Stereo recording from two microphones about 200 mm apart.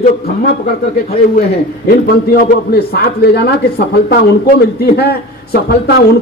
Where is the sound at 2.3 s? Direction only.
50° left (ahead or behind).